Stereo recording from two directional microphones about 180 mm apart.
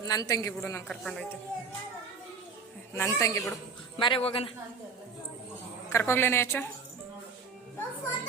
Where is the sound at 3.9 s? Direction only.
30° left (ahead or behind).